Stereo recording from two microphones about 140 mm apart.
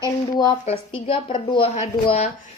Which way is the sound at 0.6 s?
40° left (ahead or behind).